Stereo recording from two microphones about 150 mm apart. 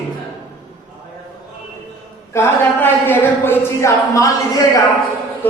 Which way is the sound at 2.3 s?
15° left (ahead or behind).